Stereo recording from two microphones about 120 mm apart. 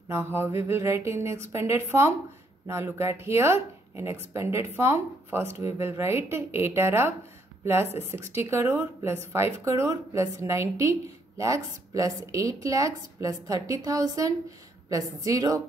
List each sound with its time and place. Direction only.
0.1 s speech: 20° right (ahead or behind)